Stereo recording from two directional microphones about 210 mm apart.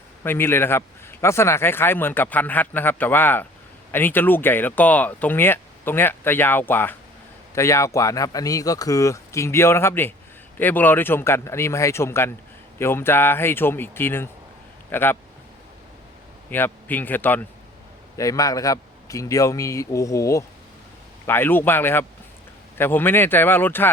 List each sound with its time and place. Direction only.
0.2 s a man's voice: 10° left (ahead or behind)
16.5 s a man's voice: 10° left (ahead or behind)